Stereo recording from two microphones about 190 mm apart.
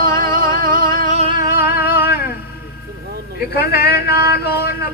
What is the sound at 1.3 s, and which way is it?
Music, 50° left (ahead or behind).